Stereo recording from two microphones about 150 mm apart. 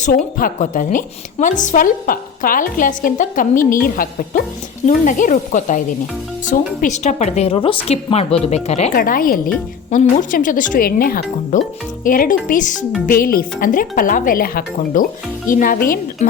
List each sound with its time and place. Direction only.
0.0 s a woman's voice: 70° left (ahead or behind)
4.9 s a woman's voice: 60° left (ahead or behind)
9.0 s a woman's voice: 75° left (ahead or behind)
13.1 s speech: 80° left
15.4 s speech: 65° left (ahead or behind)